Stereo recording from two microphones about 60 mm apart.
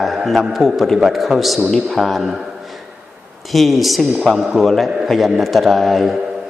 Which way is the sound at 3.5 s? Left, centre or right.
Centre.